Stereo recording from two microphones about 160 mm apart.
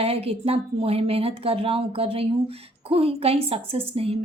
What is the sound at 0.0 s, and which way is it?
Speech, 35° right (ahead or behind).